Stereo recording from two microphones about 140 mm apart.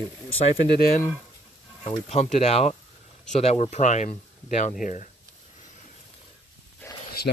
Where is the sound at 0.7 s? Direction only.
90° left.